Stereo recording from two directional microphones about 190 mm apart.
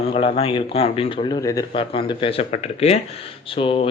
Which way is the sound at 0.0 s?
30° left (ahead or behind).